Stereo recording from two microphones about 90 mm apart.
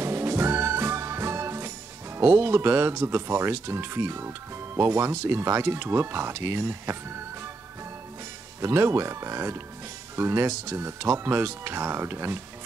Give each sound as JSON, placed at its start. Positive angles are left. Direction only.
{"t": 0.0, "sound": "music", "side_deg": -30}
{"t": 2.1, "sound": "speech", "side_deg": -30}
{"t": 8.5, "sound": "speech", "side_deg": -30}